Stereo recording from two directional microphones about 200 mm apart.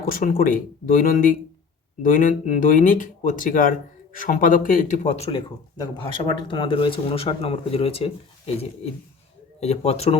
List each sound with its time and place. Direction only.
0.0 s speech: 45° left (ahead or behind)